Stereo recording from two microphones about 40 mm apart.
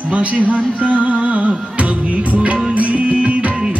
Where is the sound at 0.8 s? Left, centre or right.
Right.